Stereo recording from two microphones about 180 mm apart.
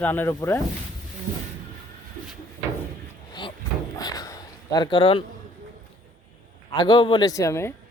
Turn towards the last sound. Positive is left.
turn(degrees=15)  # may be behind; listen again after turning